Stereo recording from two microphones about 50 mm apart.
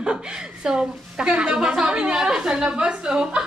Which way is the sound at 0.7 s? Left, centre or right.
Centre.